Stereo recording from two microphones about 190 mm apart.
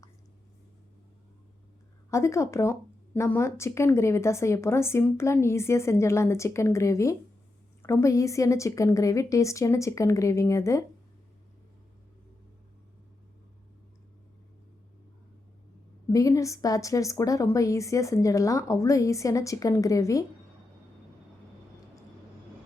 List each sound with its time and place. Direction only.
2.0 s a woman's voice: 15° left (ahead or behind)
16.0 s a woman's voice: 15° left (ahead or behind)